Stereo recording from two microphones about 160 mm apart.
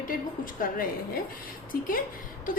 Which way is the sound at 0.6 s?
65° left (ahead or behind).